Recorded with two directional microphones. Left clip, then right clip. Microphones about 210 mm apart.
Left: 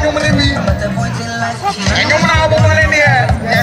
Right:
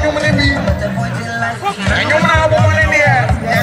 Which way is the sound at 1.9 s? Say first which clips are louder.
Even; 45° left (ahead or behind).